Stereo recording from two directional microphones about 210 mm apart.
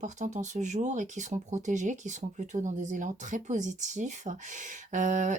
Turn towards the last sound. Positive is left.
turn(degrees=-35)  # may be behind; listen again after turning